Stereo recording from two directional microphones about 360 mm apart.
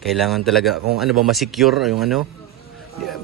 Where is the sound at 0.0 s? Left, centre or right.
Centre.